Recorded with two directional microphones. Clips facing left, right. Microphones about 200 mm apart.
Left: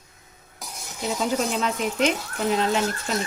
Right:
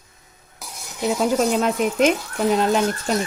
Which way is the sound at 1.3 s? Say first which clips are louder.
Right 6 dB; 45° right (ahead or behind).